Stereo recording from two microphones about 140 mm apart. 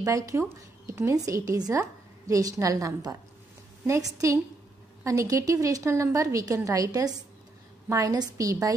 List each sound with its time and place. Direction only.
0.0 s a woman's voice: 20° right (ahead or behind)